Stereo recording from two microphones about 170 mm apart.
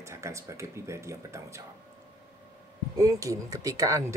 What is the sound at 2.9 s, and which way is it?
Speech, 20° right (ahead or behind).